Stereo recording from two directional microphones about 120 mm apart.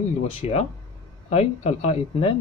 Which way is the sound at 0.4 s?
60° left (ahead or behind).